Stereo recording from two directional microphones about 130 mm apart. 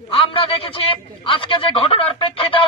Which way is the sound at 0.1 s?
45° left (ahead or behind).